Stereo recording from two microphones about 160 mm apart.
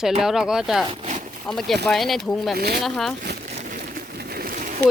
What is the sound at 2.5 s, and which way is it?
Speech, 75° right (ahead or behind).